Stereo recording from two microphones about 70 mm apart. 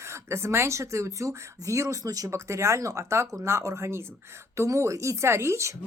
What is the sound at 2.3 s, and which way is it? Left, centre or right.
Speech, right.